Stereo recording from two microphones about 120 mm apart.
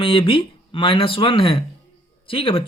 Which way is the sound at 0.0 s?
50° left (ahead or behind).